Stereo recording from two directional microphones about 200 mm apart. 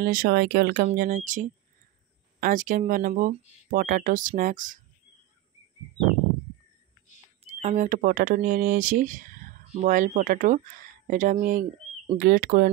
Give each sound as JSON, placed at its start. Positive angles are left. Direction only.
{"t": 0.0, "sound": "speech", "side_deg": -50}
{"t": 7.4, "sound": "speech", "side_deg": -35}